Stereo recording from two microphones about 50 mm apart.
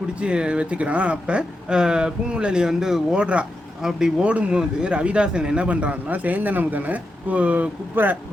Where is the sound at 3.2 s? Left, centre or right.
Right.